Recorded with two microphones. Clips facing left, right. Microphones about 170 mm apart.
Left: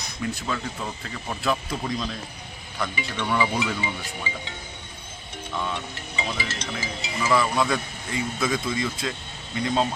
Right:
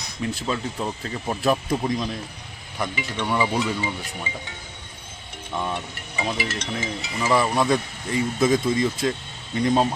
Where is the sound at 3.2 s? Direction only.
15° right (ahead or behind).